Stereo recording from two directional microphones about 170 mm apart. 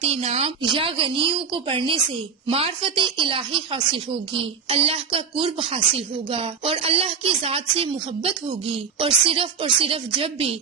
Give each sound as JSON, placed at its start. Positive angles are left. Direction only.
{"t": 0.0, "sound": "a woman's voice", "side_deg": -35}